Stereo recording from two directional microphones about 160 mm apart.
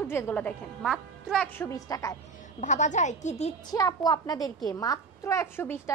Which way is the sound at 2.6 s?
50° left (ahead or behind).